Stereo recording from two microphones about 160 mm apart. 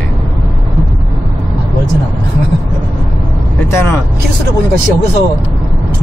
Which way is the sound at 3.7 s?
15° left (ahead or behind).